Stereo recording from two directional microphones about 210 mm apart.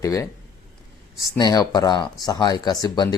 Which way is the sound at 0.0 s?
15° left (ahead or behind).